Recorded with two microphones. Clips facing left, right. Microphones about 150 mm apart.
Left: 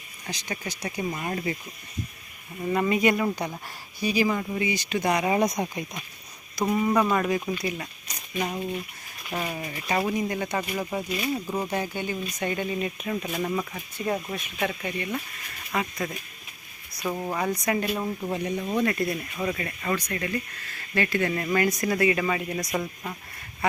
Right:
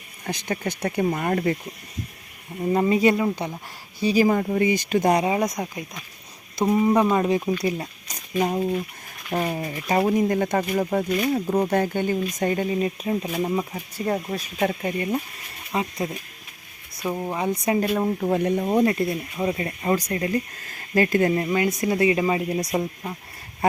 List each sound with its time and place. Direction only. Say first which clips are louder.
0.3 s speech: right 7 dB; 55° right (ahead or behind)
2.6 s speech: right 4 dB; 25° right (ahead or behind)
4.0 s speech: right 5 dB; 40° right (ahead or behind)
5.6 s speech: left 1 dB; centre (ahead or behind)
6.6 s speech: right 4 dB; 25° right (ahead or behind)
7.6 s speech: right 5 dB; 35° right (ahead or behind)
15.7 s speech: right 3 dB; 30° right (ahead or behind)
17.3 s speech: right 4 dB; 25° right (ahead or behind)
18.2 s speech: right 7 dB; 55° right (ahead or behind)
18.9 s speech: right 4 dB; 25° right (ahead or behind); by 21.3 s 40° right (ahead or behind)
21.4 s speech: right 2 dB; 15° right (ahead or behind)